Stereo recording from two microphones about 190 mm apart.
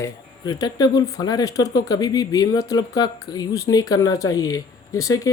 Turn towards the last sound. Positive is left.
turn(degrees=20)  # may be behind; listen again after turning